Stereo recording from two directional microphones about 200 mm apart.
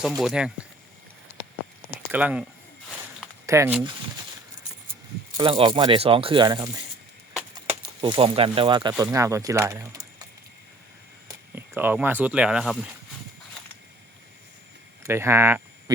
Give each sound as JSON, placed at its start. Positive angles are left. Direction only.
{"t": 0.0, "sound": "speech", "side_deg": 0}
{"t": 2.1, "sound": "speech", "side_deg": -5}
{"t": 5.4, "sound": "speech", "side_deg": -25}
{"t": 8.0, "sound": "speech", "side_deg": -25}
{"t": 11.3, "sound": "speech", "side_deg": -10}
{"t": 15.0, "sound": "speech", "side_deg": -15}